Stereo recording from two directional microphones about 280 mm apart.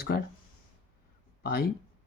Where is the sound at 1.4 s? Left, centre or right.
Left.